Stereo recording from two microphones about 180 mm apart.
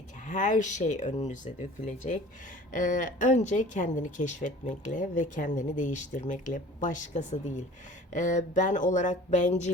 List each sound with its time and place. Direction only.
0.3 s speech: 45° left (ahead or behind)